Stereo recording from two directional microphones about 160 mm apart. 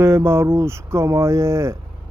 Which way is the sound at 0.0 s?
15° right (ahead or behind).